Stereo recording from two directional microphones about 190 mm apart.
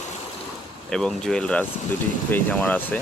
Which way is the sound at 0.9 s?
5° left (ahead or behind).